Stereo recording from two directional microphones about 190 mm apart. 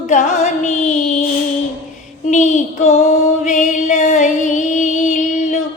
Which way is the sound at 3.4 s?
40° left (ahead or behind).